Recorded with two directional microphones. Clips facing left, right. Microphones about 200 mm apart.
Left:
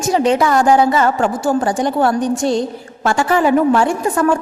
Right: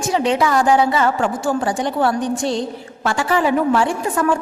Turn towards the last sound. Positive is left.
turn(degrees=45)  # may be behind; listen again after turning